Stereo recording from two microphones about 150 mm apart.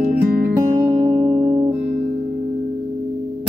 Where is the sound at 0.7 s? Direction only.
25° right (ahead or behind).